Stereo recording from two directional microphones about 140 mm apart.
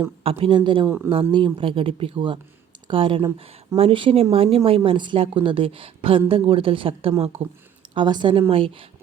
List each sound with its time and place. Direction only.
0.2 s speech: 40° right (ahead or behind)
0.9 s speech: 15° right (ahead or behind)
1.3 s speech: 35° right (ahead or behind)
7.9 s speech: 30° right (ahead or behind)